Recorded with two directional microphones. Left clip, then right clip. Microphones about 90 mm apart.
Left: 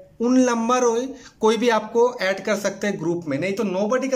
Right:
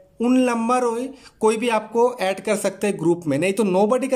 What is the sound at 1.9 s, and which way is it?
Speech, 30° right (ahead or behind).